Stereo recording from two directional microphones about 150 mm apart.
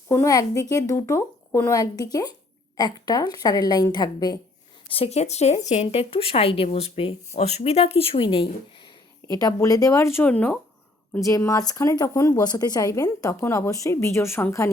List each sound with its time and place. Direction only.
0.1 s a woman's voice: 20° left (ahead or behind)
4.9 s speech: 40° left (ahead or behind)
9.2 s a woman's voice: 25° left (ahead or behind)
11.3 s a woman's voice: 20° left (ahead or behind)